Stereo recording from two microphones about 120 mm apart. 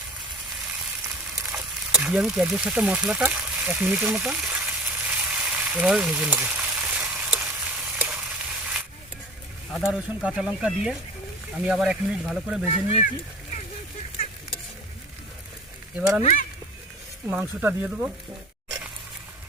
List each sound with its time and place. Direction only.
1.5 s a sound: 10° right (ahead or behind)
9.7 s speech: 5° right (ahead or behind)
12.6 s speech: 55° left (ahead or behind)
16.0 s speech: 10° right (ahead or behind)
17.2 s speech: 20° right (ahead or behind)